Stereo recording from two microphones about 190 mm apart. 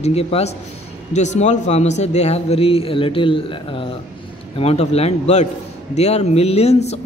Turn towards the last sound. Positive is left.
turn(degrees=35)  # may be behind; listen again after turning